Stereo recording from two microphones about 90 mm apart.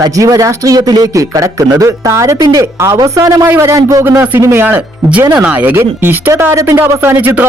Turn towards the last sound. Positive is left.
turn(degrees=-20)  # may be behind; listen again after turning